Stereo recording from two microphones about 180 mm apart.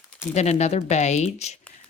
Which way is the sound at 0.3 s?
40° left (ahead or behind).